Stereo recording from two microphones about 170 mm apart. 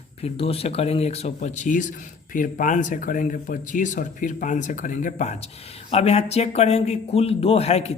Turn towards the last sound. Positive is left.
turn(degrees=35)  # may be behind; listen again after turning